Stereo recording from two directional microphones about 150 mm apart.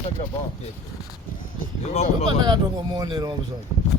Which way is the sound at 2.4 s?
25° right (ahead or behind).